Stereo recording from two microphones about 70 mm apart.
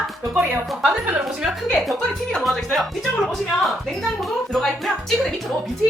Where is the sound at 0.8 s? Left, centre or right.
Centre.